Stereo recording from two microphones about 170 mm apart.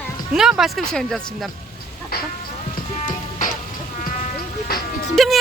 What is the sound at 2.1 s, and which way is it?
Chicken, 65° left (ahead or behind).